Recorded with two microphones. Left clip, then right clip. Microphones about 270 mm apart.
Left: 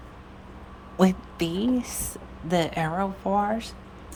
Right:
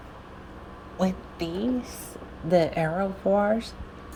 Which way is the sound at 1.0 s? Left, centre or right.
Centre.